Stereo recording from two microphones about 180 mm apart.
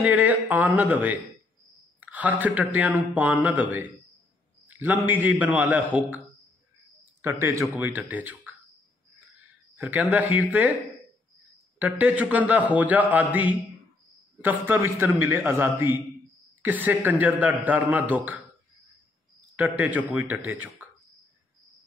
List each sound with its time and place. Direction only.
0.0 s a man's voice: 10° right (ahead or behind)
7.2 s a man's voice: 15° right (ahead or behind)
9.8 s a man's voice: 10° right (ahead or behind)
11.8 s a man's voice: 10° right (ahead or behind)
19.5 s a man's voice: 10° right (ahead or behind)